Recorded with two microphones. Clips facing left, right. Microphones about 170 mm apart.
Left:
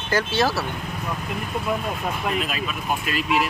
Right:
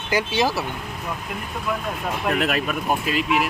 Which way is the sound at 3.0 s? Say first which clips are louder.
Left 1 dB; 20° right (ahead or behind).